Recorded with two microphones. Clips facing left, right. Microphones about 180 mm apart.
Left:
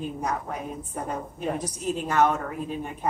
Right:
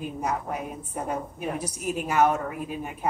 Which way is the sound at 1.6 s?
10° right (ahead or behind).